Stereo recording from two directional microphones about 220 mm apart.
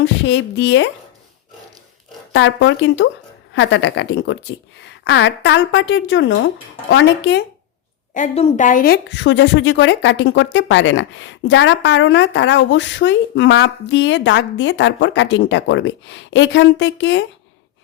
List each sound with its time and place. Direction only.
0.0 s speech: 55° left (ahead or behind)
2.3 s a woman's voice: 55° left (ahead or behind)
8.1 s a woman's voice: 30° left (ahead or behind); by 17.2 s 55° left (ahead or behind)